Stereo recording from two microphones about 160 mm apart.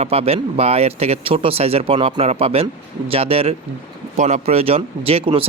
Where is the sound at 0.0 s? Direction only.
40° right (ahead or behind).